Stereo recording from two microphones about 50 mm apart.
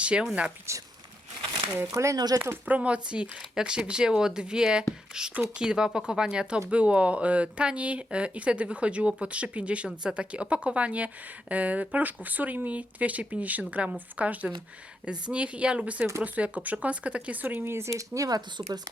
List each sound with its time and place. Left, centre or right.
0.0 s speech: right
0.7 s speech: right
1.9 s speech: right
2.6 s speech: right
17.4 s speech: right
17.8 s speech: right